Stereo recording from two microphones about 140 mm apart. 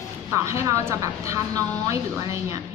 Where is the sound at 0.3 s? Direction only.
20° right (ahead or behind).